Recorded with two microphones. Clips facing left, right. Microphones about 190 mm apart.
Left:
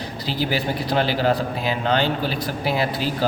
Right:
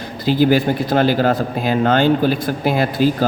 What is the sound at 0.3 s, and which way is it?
A man's voice, 50° right (ahead or behind).